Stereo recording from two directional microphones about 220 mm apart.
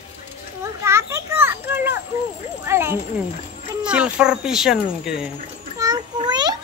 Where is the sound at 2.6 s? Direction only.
10° right (ahead or behind).